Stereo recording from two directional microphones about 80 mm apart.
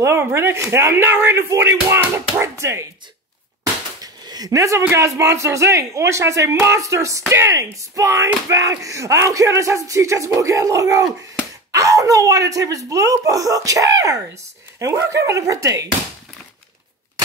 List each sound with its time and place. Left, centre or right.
0.0 s speech: right
4.0 s speech: right